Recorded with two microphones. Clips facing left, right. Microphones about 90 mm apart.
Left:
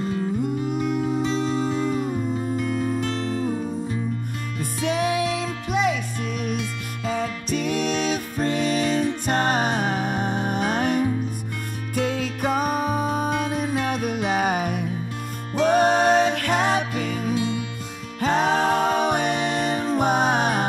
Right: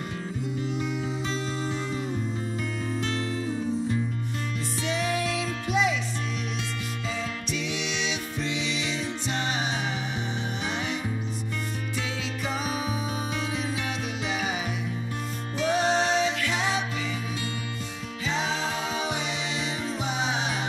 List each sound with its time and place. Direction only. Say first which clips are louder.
0.4 s music: left 6 dB; 50° left (ahead or behind)
4.6 s music: left 7 dB; 50° left (ahead or behind)